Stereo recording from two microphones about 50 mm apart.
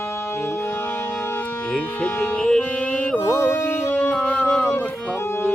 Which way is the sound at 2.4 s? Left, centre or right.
Centre.